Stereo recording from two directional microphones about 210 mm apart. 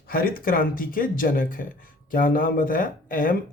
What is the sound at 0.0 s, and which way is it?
Speech, 45° left (ahead or behind).